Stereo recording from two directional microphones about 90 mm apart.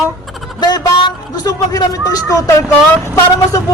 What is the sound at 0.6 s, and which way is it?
A woman's voice, 50° left (ahead or behind).